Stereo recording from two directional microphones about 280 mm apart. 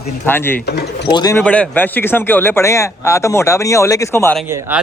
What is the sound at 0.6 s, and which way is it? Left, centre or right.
Speech, left.